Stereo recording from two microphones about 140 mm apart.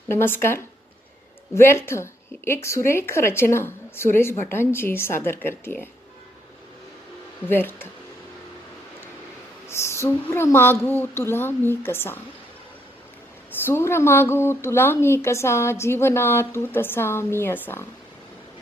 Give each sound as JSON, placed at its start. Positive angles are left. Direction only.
{"t": 0.1, "sound": "a woman's voice", "side_deg": 15}
{"t": 7.5, "sound": "a woman's voice", "side_deg": 15}
{"t": 9.6, "sound": "a woman's voice", "side_deg": 20}
{"t": 13.7, "sound": "a woman's voice", "side_deg": 15}